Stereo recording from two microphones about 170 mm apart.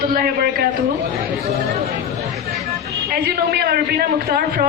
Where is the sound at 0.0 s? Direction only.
60° right (ahead or behind).